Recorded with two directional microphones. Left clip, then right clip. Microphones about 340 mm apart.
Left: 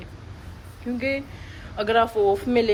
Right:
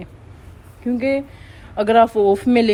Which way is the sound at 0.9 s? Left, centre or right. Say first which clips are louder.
Right 6 dB; centre.